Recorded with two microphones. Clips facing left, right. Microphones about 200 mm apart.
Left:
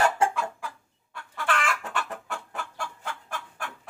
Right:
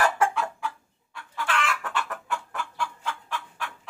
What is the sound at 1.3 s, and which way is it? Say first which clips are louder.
Chicken: even; 50° left (ahead or behind).